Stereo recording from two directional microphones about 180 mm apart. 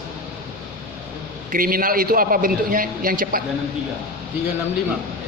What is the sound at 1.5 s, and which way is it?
A man's voice, 50° right (ahead or behind).